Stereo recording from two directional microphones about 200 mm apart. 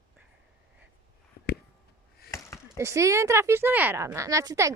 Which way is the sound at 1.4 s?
50° left (ahead or behind).